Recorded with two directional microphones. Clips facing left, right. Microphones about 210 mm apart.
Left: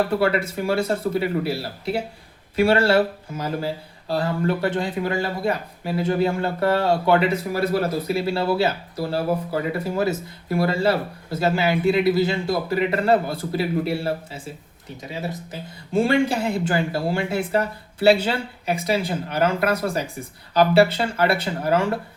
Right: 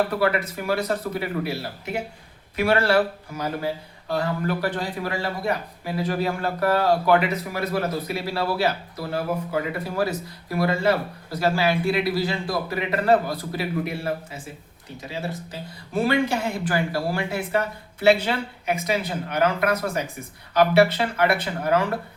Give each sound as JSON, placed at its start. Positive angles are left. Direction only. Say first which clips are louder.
{"t": 0.1, "sound": "a man's voice", "louder": "left 2 dB", "side_deg": 30}
{"t": 15.9, "sound": "a man's voice", "louder": "left 3 dB", "side_deg": 25}